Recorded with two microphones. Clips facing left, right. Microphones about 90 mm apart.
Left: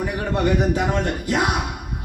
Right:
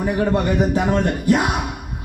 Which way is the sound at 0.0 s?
35° right (ahead or behind).